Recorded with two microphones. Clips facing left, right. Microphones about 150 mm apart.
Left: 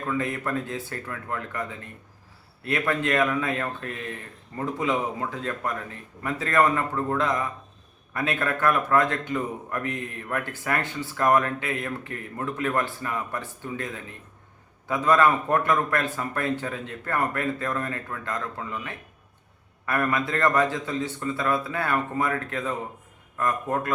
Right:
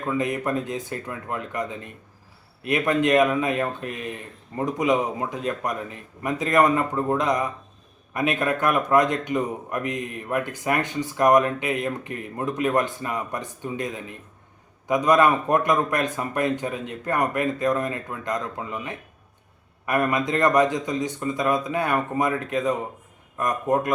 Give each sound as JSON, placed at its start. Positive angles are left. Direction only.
{"t": 0.0, "sound": "speech", "side_deg": -20}